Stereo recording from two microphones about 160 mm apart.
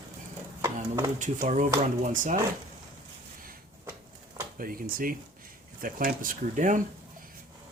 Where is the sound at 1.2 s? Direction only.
50° right (ahead or behind).